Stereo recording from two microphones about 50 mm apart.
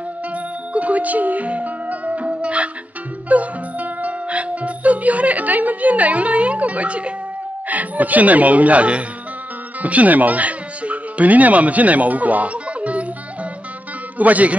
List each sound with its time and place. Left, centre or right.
0.7 s music: right
7.6 s speech: right
14.1 s speech: right